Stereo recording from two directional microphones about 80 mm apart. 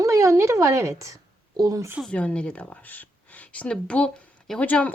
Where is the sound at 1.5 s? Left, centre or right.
Right.